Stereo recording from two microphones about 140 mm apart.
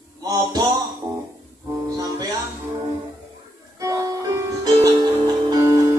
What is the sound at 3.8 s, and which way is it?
Music, 25° right (ahead or behind).